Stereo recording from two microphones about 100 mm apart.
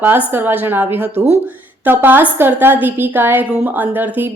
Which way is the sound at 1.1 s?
90° right.